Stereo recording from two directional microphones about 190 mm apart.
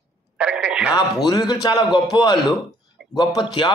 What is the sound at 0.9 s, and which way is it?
A man's voice, 20° left (ahead or behind).